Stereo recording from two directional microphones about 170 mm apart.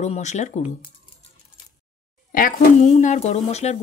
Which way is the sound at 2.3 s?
55° left (ahead or behind).